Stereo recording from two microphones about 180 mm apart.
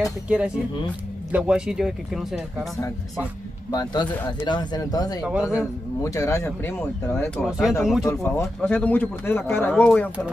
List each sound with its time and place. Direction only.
0.0 s speech: 5° right (ahead or behind)
3.7 s speech: 25° left (ahead or behind)
5.2 s a man's voice: 5° right (ahead or behind)
6.0 s speech: 15° left (ahead or behind)
7.4 s speech: centre (ahead or behind)
8.0 s speech: 15° left (ahead or behind)